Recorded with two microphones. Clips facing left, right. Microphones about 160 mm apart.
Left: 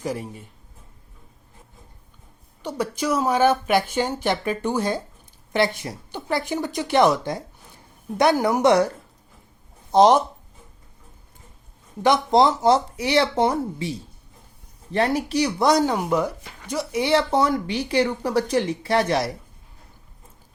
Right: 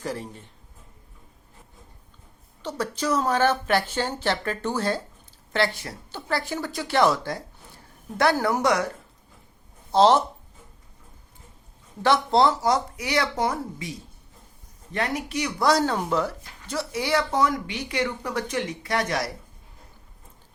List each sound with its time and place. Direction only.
0.0 s speech: 10° left (ahead or behind)
2.6 s a woman's voice: 10° left (ahead or behind)
9.9 s speech: 15° left (ahead or behind)
12.0 s a woman's voice: 15° left (ahead or behind)
14.9 s speech: 30° left (ahead or behind)
15.6 s speech: 15° left (ahead or behind)